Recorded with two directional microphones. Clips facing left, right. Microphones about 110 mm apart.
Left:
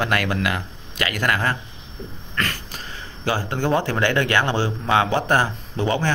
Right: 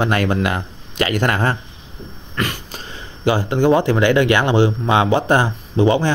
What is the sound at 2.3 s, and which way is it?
Throat clearing, 15° right (ahead or behind).